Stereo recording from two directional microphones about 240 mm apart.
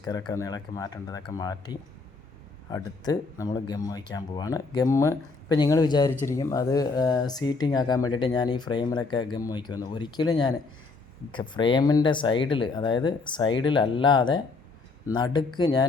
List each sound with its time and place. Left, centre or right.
0.3 s speech: centre